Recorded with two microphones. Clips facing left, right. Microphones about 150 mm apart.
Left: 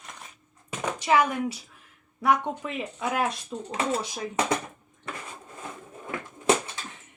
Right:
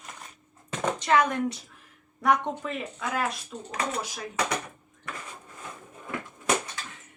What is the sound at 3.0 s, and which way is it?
Speech, 25° left (ahead or behind).